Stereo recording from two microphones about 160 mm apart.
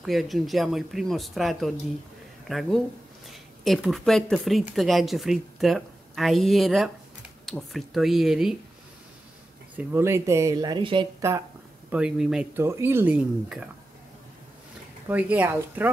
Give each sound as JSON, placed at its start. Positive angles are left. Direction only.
{"t": 0.0, "sound": "speech", "side_deg": 0}
{"t": 9.8, "sound": "speech", "side_deg": -15}
{"t": 11.9, "sound": "speech", "side_deg": -5}
{"t": 12.5, "sound": "speech", "side_deg": -15}
{"t": 15.0, "sound": "speech", "side_deg": -10}